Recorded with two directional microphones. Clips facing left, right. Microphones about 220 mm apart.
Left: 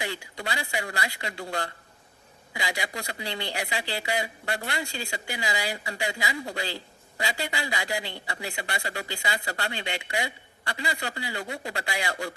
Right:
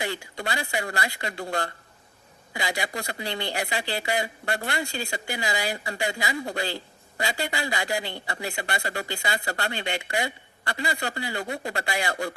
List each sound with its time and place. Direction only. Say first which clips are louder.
0.0 s a man's voice: right 3 dB; 50° right (ahead or behind)